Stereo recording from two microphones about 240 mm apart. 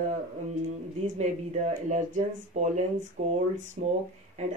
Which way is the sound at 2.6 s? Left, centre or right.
Right.